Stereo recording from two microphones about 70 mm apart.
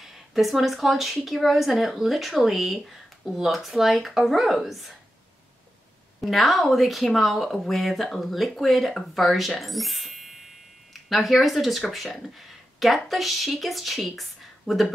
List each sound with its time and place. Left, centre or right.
0.0 s speech: centre
6.2 s speech: centre